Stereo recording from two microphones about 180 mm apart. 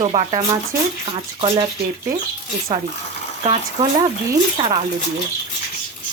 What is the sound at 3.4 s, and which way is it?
Speech, 35° right (ahead or behind).